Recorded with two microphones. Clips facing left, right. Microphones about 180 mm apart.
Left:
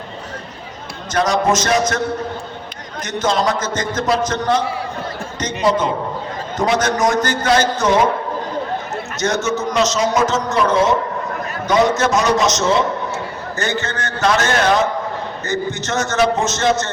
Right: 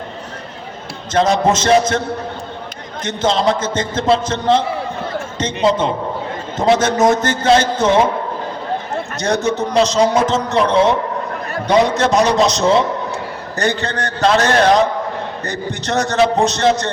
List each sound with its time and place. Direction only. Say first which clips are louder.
1.1 s a man's voice: right 2 dB; 25° right (ahead or behind)
3.0 s a man's voice: right 2 dB; 30° right (ahead or behind)
5.5 s a man's voice: right 1 dB; 5° left (ahead or behind)
6.6 s a man's voice: right 4 dB; 25° right (ahead or behind)
9.1 s a man's voice: right 2 dB; 35° right (ahead or behind)